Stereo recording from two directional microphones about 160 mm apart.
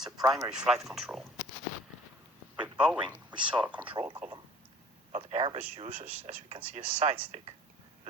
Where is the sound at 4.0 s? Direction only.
35° right (ahead or behind).